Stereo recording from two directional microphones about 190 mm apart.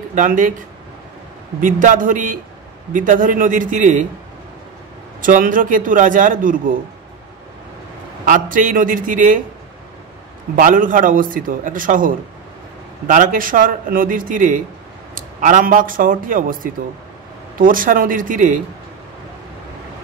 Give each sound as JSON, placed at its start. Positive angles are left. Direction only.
{"t": 0.1, "sound": "a man's voice", "side_deg": -45}
{"t": 5.2, "sound": "a man's voice", "side_deg": -45}
{"t": 8.3, "sound": "a man's voice", "side_deg": -45}
{"t": 10.5, "sound": "a man's voice", "side_deg": -45}